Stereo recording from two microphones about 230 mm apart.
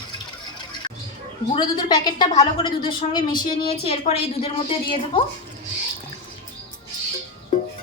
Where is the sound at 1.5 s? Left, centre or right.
Centre.